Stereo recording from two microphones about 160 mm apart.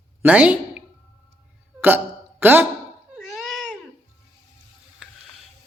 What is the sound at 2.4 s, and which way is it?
Speech, 15° right (ahead or behind).